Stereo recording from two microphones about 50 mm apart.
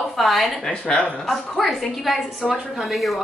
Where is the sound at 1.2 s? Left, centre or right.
Centre.